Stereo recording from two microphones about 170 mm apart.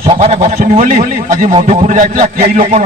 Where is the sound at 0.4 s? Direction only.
50° right (ahead or behind).